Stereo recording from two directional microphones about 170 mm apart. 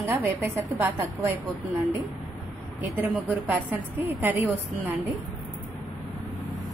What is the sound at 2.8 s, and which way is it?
A woman's voice, 10° right (ahead or behind).